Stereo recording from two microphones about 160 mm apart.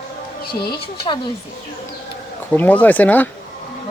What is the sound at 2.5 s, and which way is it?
Speech, 10° left (ahead or behind).